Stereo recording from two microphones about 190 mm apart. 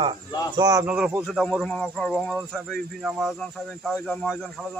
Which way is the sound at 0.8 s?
5° right (ahead or behind).